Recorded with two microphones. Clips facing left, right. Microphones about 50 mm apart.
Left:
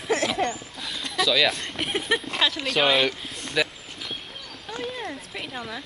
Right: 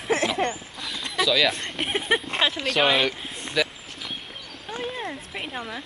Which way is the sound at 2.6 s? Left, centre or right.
Centre.